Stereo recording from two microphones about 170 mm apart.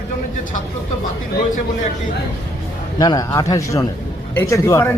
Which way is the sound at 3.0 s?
20° left (ahead or behind).